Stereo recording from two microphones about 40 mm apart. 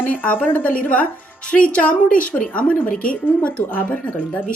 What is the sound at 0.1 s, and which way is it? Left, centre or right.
Speech, left.